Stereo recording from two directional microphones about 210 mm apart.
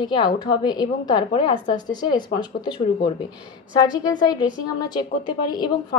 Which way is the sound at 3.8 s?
20° left (ahead or behind).